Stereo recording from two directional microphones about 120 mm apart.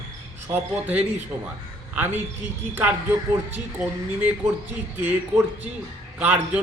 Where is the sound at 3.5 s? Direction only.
15° right (ahead or behind).